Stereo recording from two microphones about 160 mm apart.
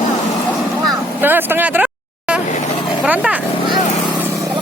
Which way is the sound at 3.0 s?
10° right (ahead or behind).